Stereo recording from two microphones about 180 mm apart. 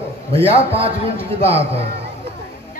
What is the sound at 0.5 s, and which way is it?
A man's voice, 30° right (ahead or behind).